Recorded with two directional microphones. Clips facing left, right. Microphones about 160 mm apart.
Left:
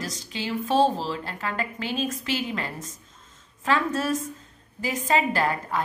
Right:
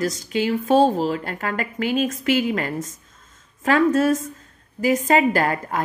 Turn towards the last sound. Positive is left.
turn(degrees=-45)  # may be behind; listen again after turning